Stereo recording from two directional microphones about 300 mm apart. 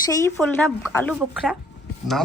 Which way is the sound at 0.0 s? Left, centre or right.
Centre.